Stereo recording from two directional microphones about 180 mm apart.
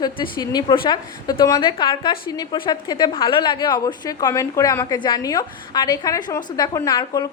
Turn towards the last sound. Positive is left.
turn(degrees=20)  # may be behind; listen again after turning